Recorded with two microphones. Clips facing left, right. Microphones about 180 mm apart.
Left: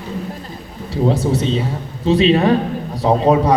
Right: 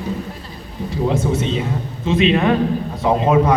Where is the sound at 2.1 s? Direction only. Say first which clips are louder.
Left 3 dB; 35° left (ahead or behind).